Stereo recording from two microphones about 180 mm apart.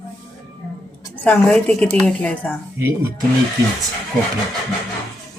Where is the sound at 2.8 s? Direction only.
15° right (ahead or behind).